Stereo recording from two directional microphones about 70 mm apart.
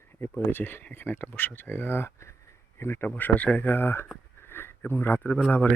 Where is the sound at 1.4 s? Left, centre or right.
Left.